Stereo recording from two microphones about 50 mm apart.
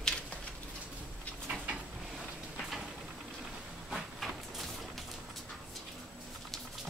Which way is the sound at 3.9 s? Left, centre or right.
Centre.